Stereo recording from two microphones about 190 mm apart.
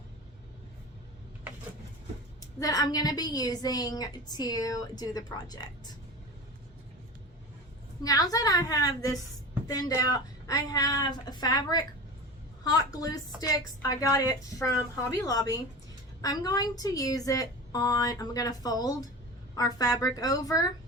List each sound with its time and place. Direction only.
2.4 s a woman's voice: 20° left (ahead or behind)
8.0 s a woman's voice: 20° left (ahead or behind)